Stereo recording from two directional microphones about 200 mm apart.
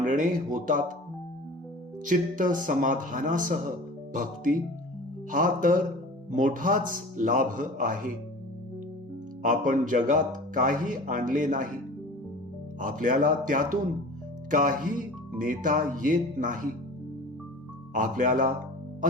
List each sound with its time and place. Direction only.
0.0 s speech: 40° right (ahead or behind)
2.0 s a man's voice: 40° right (ahead or behind)
9.4 s speech: 40° right (ahead or behind)
12.8 s a man's voice: 40° right (ahead or behind)
17.9 s speech: 40° right (ahead or behind)